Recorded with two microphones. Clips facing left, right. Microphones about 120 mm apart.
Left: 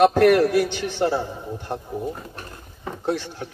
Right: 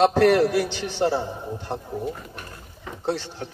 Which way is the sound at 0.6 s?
15° left (ahead or behind).